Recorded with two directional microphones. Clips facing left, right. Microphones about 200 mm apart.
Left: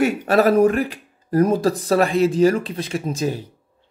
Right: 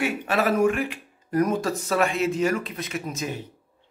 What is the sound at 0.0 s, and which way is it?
A man's voice, 40° left (ahead or behind).